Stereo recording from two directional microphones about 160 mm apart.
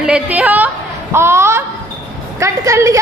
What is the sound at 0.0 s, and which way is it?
A woman's voice, 10° right (ahead or behind).